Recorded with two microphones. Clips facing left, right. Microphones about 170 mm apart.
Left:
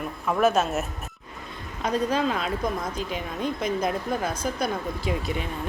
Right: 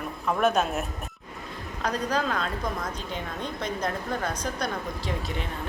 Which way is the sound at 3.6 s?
10° left (ahead or behind).